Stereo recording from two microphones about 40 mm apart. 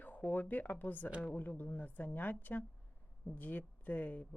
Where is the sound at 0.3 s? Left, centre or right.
Left.